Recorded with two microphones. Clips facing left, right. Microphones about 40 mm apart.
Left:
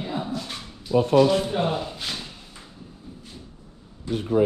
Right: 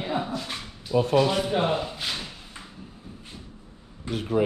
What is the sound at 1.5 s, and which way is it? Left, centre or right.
Speech, centre.